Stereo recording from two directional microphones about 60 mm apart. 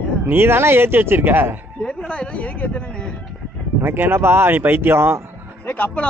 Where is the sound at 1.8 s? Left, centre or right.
Centre.